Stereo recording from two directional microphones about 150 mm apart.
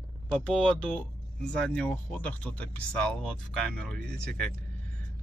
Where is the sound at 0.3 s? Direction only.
5° left (ahead or behind).